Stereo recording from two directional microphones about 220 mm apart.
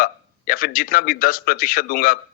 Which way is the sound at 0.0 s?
40° left (ahead or behind).